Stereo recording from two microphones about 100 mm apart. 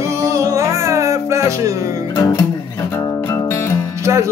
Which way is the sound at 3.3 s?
25° left (ahead or behind).